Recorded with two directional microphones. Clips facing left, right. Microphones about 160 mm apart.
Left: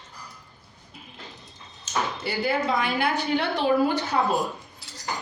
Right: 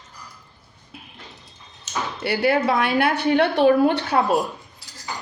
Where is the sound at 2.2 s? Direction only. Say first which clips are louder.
Right 9 dB; 70° right (ahead or behind).